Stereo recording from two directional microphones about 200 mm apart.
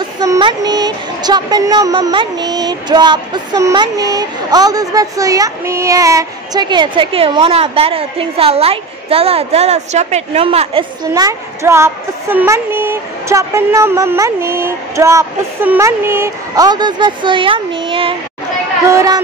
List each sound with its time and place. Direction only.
0.2 s speech: 20° right (ahead or behind)